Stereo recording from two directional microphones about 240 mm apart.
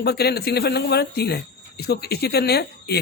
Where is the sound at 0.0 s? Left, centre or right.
Left.